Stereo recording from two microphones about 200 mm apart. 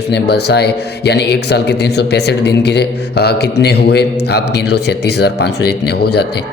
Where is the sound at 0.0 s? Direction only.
55° left (ahead or behind).